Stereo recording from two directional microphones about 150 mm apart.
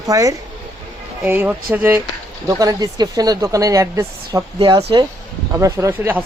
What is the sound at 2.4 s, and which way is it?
Speech, 25° right (ahead or behind).